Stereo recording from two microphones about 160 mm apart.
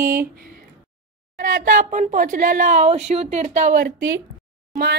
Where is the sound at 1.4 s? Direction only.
65° right (ahead or behind).